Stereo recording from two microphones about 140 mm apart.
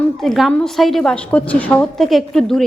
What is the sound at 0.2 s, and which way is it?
A woman's voice, centre (ahead or behind).